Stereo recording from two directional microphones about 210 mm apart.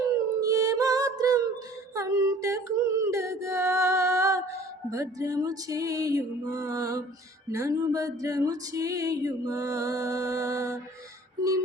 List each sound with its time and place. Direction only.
0.3 s music: 15° right (ahead or behind)
2.0 s female singing: 15° right (ahead or behind)
4.9 s music: 15° right (ahead or behind)